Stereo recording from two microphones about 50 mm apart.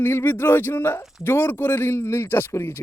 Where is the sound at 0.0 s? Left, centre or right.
Left.